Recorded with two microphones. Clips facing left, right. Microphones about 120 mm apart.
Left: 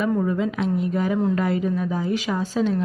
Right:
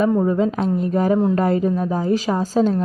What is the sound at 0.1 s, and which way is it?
Speech, 25° right (ahead or behind).